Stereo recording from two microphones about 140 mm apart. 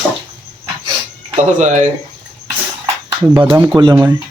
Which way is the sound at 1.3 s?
60° right (ahead or behind).